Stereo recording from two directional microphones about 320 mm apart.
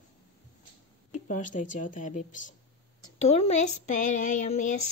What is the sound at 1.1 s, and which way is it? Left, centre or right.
Speech, left.